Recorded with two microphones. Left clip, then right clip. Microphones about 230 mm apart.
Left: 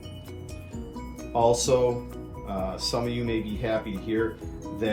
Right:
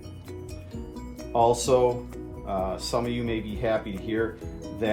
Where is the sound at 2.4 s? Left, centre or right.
Right.